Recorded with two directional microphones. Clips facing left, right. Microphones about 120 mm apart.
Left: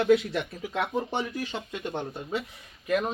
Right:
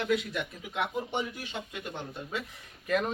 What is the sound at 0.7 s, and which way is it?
Speech, 90° left.